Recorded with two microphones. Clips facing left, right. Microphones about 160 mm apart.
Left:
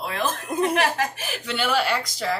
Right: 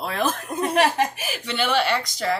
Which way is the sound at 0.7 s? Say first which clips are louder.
Right 3 dB; 30° right (ahead or behind).